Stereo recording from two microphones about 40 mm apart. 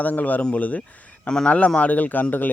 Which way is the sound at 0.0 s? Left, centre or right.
Left.